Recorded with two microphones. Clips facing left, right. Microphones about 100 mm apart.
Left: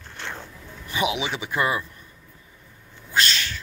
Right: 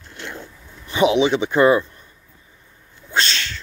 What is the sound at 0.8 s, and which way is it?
Speech, 30° right (ahead or behind).